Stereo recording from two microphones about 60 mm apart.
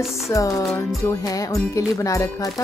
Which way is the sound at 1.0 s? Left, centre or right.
Left.